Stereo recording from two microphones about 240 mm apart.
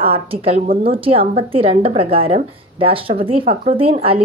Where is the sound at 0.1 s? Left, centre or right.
Right.